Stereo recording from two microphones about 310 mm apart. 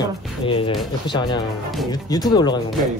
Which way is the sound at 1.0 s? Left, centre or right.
Centre.